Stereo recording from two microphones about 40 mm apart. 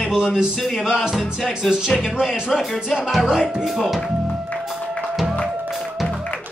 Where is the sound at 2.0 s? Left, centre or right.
Centre.